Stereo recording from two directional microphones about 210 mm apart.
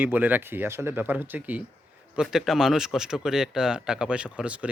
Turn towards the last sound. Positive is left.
turn(degrees=-5)  # may be behind; listen again after turning